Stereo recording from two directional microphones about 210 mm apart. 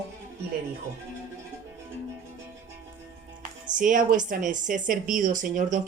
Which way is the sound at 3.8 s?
40° right (ahead or behind).